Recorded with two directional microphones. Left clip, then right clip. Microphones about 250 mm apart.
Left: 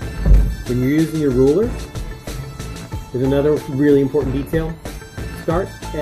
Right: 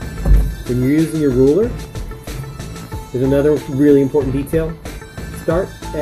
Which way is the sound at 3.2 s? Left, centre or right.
Centre.